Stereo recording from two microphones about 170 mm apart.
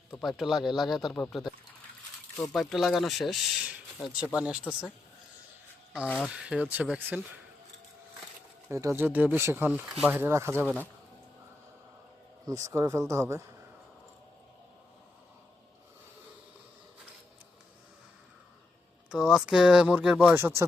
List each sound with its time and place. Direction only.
0.2 s speech: centre (ahead or behind)
6.1 s speech: 5° left (ahead or behind)
6.3 s speech: 5° right (ahead or behind)
8.7 s speech: 15° right (ahead or behind)
12.5 s speech: 20° right (ahead or behind)
19.1 s speech: centre (ahead or behind)